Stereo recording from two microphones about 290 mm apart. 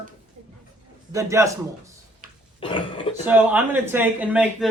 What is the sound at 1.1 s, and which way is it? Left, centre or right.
Speech, centre.